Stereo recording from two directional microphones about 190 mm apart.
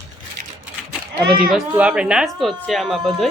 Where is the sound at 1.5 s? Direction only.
5° right (ahead or behind).